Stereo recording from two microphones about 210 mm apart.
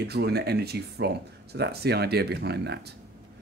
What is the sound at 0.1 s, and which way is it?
Speech, 50° right (ahead or behind).